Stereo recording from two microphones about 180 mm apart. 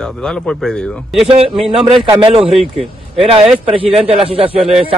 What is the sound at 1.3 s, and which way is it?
Speech, 30° right (ahead or behind).